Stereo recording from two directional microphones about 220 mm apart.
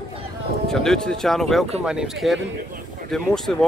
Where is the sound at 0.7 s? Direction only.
Centre (ahead or behind).